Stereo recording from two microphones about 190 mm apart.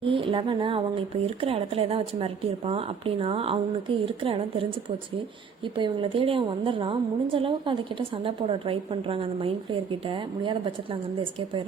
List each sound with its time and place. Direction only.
0.0 s a woman's voice: 25° right (ahead or behind)
5.7 s a woman's voice: 25° right (ahead or behind)